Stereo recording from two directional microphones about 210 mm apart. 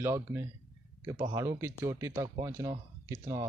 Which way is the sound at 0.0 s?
10° right (ahead or behind).